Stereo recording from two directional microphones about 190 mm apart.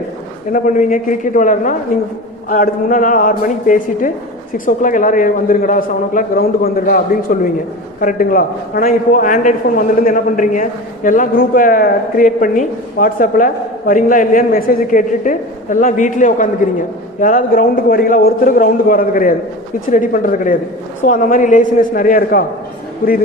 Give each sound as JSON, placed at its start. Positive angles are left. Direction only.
{"t": 0.5, "sound": "a man's voice", "side_deg": 45}